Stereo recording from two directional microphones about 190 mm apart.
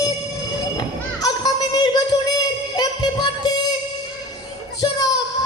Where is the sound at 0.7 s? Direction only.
20° left (ahead or behind).